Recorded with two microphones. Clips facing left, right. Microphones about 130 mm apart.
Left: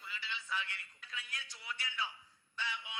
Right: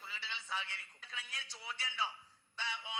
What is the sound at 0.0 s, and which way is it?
A man's voice, 30° right (ahead or behind).